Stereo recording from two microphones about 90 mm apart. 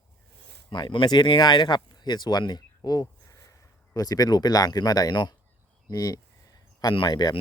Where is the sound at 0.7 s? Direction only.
60° left (ahead or behind).